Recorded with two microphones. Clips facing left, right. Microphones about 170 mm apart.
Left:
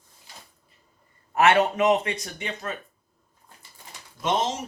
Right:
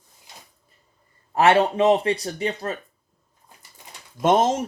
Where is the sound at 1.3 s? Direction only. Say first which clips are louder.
Right 2 dB; 30° right (ahead or behind).